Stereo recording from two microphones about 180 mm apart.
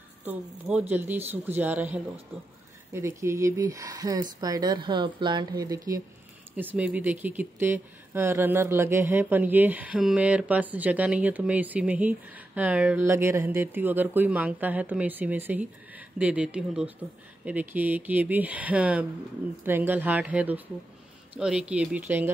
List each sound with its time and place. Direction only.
0.2 s speech: 10° right (ahead or behind)